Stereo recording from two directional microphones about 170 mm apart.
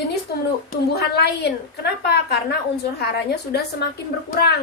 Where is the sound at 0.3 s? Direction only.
65° left (ahead or behind).